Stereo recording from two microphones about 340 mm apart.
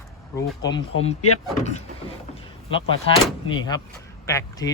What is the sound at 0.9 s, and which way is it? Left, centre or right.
Speech, left.